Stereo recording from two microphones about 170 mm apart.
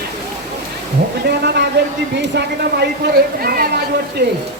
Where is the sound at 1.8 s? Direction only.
90° right.